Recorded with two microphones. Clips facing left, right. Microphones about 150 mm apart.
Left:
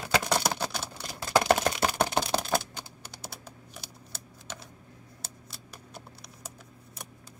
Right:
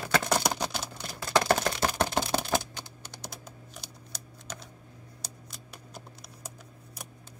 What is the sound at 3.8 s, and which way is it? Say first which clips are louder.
Scissors: even; 5° left (ahead or behind).